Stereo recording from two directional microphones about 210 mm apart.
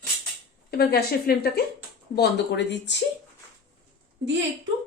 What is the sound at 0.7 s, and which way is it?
A woman's voice, 50° left (ahead or behind).